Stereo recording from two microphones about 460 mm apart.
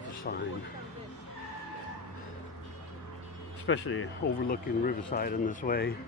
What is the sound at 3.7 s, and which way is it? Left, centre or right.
Speech, left.